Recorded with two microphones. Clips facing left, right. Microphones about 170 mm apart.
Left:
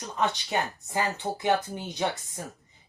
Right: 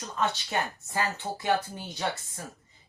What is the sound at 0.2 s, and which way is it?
Speech, 15° left (ahead or behind).